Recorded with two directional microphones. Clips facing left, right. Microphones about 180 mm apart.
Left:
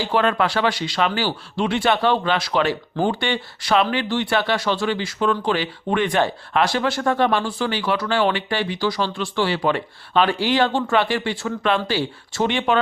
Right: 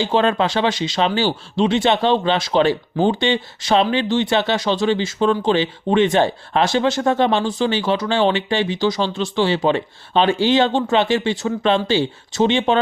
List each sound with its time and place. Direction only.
0.0 s speech: 25° right (ahead or behind)